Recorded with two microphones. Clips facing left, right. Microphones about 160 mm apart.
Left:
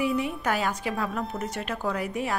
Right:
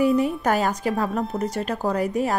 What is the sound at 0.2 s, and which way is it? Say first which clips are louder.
A woman's voice: right 6 dB; 40° right (ahead or behind).